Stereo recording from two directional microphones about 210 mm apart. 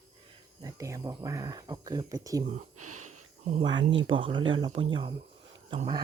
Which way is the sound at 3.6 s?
20° right (ahead or behind).